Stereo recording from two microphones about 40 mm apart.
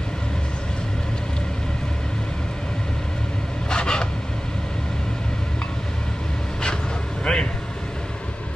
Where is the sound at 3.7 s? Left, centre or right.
Left.